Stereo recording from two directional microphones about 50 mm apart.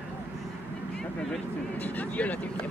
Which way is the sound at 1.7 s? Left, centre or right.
Left.